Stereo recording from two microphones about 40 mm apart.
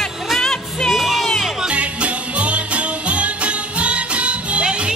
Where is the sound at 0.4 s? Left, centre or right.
Centre.